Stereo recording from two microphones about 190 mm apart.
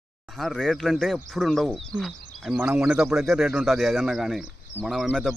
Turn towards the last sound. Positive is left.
turn(degrees=0)  # may be behind; listen again after turning